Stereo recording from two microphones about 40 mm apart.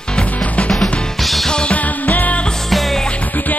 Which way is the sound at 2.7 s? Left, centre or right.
Centre.